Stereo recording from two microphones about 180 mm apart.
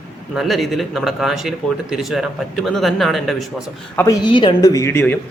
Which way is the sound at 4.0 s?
20° left (ahead or behind).